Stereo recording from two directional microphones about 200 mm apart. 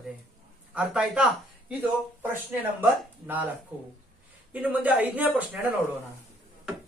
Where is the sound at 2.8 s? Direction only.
10° right (ahead or behind).